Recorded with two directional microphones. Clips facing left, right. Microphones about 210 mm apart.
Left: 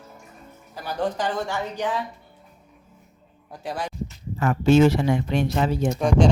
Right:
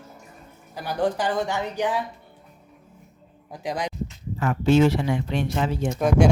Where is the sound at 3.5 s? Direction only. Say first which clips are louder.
Right 2 dB; 15° right (ahead or behind).